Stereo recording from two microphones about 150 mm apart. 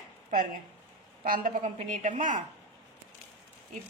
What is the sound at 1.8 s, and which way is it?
Speech, 55° right (ahead or behind).